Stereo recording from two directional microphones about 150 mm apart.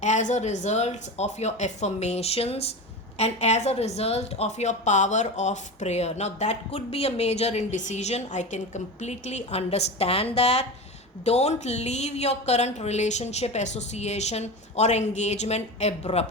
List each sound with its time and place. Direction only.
0.0 s a woman's voice: 55° left (ahead or behind)